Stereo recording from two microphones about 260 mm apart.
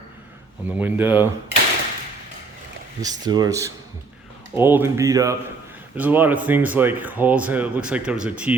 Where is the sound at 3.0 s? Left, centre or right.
Centre.